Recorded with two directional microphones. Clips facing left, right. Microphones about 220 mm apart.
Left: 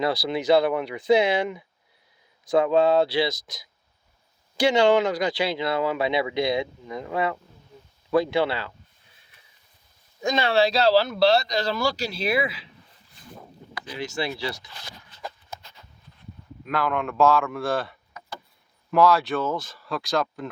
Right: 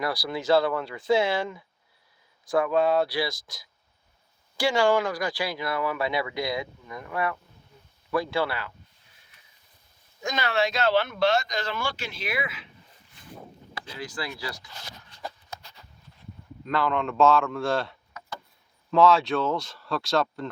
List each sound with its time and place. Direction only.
0.0 s speech: 25° left (ahead or behind)
10.2 s speech: 30° left (ahead or behind)
14.0 s speech: 25° left (ahead or behind)
16.6 s speech: 5° left (ahead or behind)
18.9 s speech: centre (ahead or behind)